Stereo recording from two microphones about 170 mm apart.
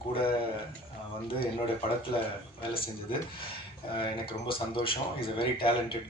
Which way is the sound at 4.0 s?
30° left (ahead or behind).